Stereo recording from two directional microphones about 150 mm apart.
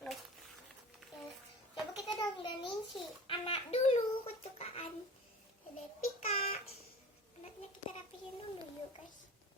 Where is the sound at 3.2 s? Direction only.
35° left (ahead or behind).